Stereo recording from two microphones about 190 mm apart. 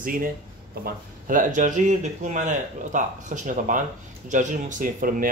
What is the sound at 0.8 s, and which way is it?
Speech, 45° right (ahead or behind).